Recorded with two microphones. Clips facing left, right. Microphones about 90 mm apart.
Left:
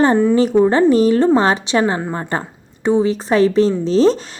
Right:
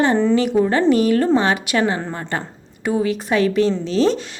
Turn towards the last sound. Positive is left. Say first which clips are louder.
# left 4 dB
turn(degrees=35)  # may be behind; listen again after turning